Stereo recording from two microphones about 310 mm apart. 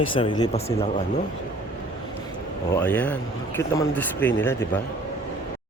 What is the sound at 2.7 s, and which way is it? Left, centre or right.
Speech, centre.